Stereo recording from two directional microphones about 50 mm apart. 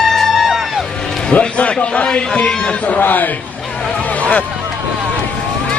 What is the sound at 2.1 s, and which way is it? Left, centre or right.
Speech, left.